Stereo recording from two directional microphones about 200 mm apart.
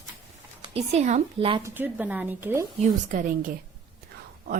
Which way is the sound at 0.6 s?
30° right (ahead or behind).